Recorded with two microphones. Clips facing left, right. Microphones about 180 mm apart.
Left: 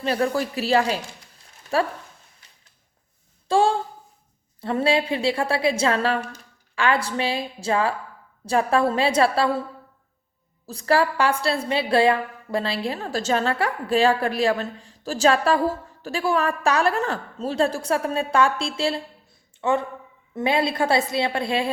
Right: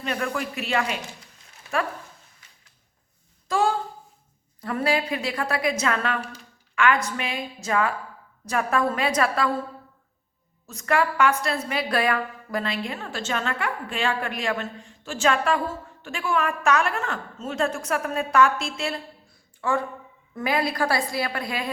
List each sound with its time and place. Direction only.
0.0 s a woman's voice: 35° left (ahead or behind)
3.5 s a sound: 30° left (ahead or behind)
4.6 s a woman's voice: 30° left (ahead or behind)
10.7 s a woman's voice: 35° left (ahead or behind)